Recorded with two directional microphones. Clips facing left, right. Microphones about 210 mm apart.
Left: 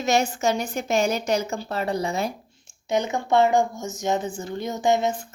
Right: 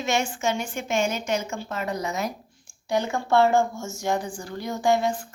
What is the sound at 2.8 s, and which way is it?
A woman's voice, 20° left (ahead or behind).